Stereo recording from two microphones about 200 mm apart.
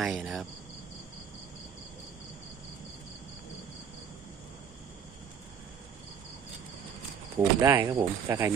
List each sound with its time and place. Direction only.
0.0 s cricket: centre (ahead or behind)
7.3 s speech: 15° right (ahead or behind)